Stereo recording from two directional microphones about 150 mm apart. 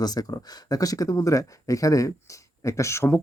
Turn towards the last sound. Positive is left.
turn(degrees=20)  # may be behind; listen again after turning